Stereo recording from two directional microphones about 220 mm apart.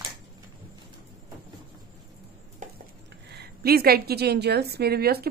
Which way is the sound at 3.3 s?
45° right (ahead or behind).